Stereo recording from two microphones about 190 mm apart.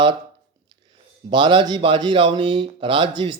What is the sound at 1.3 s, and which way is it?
Speech, 25° right (ahead or behind).